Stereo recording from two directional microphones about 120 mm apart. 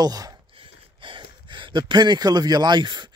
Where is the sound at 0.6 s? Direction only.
45° right (ahead or behind).